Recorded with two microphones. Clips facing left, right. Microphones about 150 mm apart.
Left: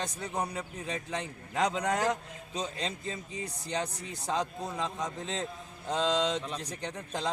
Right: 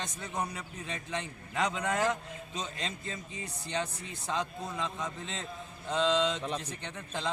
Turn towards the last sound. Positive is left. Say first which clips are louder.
# left 2 dB
turn(degrees=40)  # may be behind; listen again after turning